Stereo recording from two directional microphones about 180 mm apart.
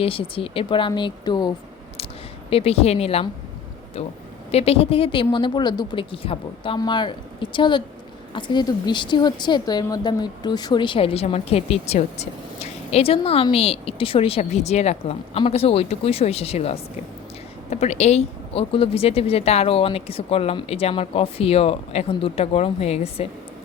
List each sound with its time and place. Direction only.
0.0 s a woman's voice: 30° left (ahead or behind)
4.5 s a woman's voice: 35° left (ahead or behind)